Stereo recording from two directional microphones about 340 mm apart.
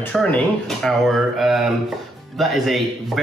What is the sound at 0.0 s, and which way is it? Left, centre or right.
A man's voice, centre.